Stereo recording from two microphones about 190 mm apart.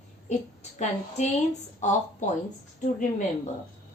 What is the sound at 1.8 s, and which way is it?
Speech, 40° left (ahead or behind).